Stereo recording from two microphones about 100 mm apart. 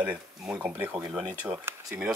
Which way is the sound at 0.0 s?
15° right (ahead or behind).